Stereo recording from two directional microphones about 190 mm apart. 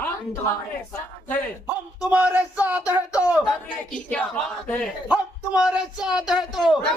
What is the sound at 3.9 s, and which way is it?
Speech, 5° left (ahead or behind).